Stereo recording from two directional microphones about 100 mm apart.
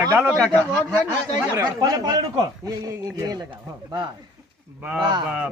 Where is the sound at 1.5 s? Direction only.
35° right (ahead or behind).